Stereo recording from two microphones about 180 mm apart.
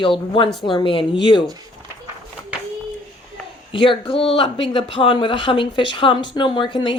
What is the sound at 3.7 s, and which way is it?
Speech, 25° left (ahead or behind).